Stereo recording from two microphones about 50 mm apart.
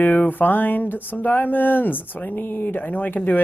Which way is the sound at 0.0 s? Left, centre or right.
Left.